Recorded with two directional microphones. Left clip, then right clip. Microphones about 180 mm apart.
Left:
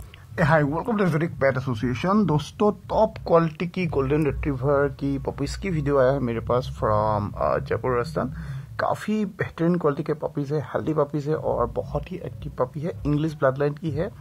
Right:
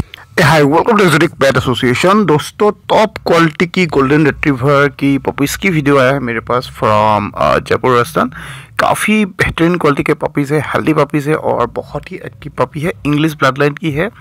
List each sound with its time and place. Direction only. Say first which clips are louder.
0.5 s speech: right 13 dB; 40° right (ahead or behind)
6.0 s speech: right 9 dB; 10° right (ahead or behind)
7.0 s speech: right 12 dB; 40° right (ahead or behind)
11.3 s speech: right 9 dB; 25° right (ahead or behind)
12.5 s speech: right 11 dB; 35° right (ahead or behind)